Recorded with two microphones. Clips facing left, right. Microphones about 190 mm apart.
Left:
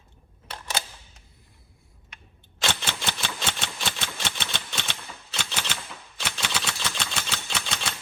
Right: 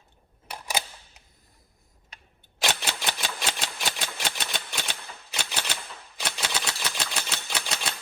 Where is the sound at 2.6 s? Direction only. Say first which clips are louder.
Even; 15° right (ahead or behind).